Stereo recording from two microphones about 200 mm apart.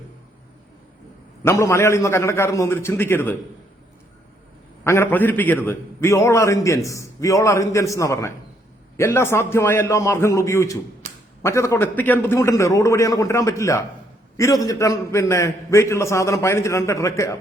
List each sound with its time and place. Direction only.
1.5 s a man's voice: 15° left (ahead or behind)
4.8 s a man's voice: 10° left (ahead or behind)